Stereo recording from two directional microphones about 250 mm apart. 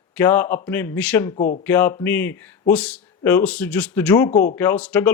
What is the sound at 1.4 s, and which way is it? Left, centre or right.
Speech, left.